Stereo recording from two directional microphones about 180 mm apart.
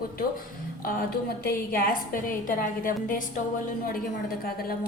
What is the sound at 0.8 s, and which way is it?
A woman's voice, 60° left (ahead or behind).